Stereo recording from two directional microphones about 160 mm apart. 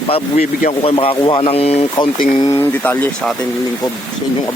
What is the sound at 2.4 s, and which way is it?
Speech, 15° left (ahead or behind).